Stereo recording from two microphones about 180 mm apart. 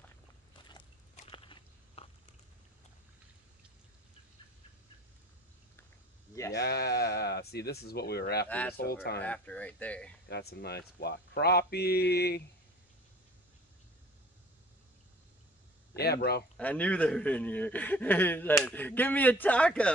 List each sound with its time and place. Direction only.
1.1 s a sound: 30° left (ahead or behind)
6.5 s speech: 65° left (ahead or behind)
8.5 s a man's voice: 10° left (ahead or behind)
8.7 s speech: 60° left (ahead or behind)
9.2 s a man's voice: 10° left (ahead or behind)
10.2 s speech: 65° left (ahead or behind)
16.0 s speech: 60° left (ahead or behind)
16.5 s a man's voice: 10° left (ahead or behind)